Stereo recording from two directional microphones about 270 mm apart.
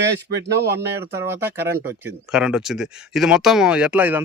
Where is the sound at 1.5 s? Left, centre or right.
Centre.